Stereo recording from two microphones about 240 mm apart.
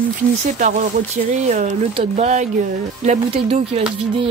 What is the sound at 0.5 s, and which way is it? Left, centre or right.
Speech, right.